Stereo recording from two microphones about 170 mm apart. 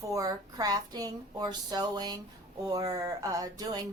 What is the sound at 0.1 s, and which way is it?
A woman's voice, 20° right (ahead or behind).